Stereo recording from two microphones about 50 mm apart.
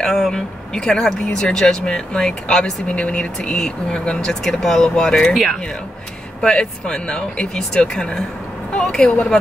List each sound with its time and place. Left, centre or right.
0.0 s speech: centre
6.4 s speech: centre
8.7 s a sound: centre